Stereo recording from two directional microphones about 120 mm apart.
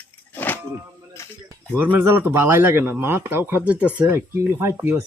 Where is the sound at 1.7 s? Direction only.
15° right (ahead or behind).